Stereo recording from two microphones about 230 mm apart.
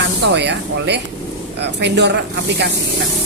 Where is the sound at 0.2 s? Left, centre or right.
Right.